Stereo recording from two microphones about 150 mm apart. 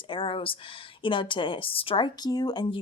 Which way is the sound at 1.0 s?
35° left (ahead or behind).